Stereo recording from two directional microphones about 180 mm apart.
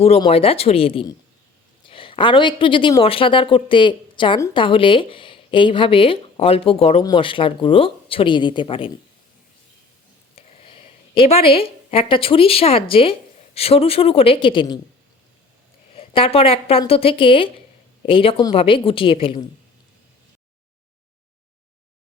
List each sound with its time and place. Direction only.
0.2 s a woman's voice: 30° left (ahead or behind)
10.3 s a woman's voice: 30° left (ahead or behind)
16.0 s a woman's voice: 30° left (ahead or behind)